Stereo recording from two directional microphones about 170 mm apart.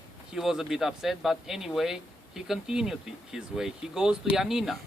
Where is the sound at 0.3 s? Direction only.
Centre (ahead or behind).